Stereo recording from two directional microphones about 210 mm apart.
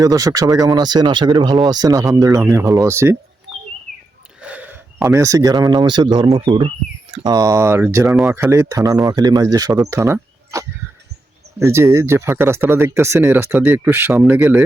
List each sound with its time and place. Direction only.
0.0 s speech: 15° right (ahead or behind)
4.4 s speech: 5° right (ahead or behind)
8.0 s speech: centre (ahead or behind)